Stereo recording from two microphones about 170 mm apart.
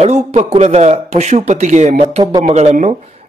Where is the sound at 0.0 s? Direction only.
40° right (ahead or behind).